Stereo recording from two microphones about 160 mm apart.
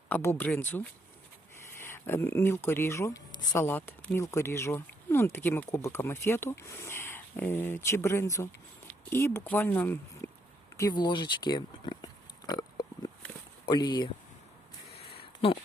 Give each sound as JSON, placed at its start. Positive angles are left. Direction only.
{"t": 0.1, "sound": "speech", "side_deg": 15}
{"t": 1.8, "sound": "speech", "side_deg": 15}
{"t": 10.8, "sound": "oink", "side_deg": 25}
{"t": 13.7, "sound": "speech", "side_deg": 30}
{"t": 14.9, "sound": "a sound", "side_deg": 35}